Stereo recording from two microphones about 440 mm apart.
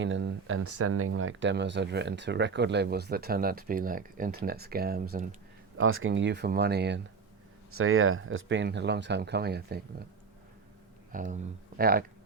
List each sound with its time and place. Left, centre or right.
0.0 s speech: right
11.1 s speech: centre